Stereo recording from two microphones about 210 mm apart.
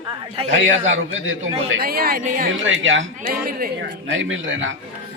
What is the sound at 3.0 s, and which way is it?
A man's voice, 45° right (ahead or behind).